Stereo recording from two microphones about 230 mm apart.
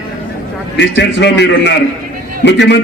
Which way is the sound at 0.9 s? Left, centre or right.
Left.